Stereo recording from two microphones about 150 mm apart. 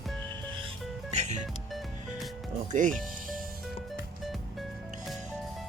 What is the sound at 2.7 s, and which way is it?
Speech, 60° right (ahead or behind).